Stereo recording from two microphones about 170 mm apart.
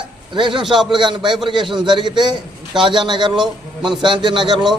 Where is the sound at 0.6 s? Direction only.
Centre (ahead or behind).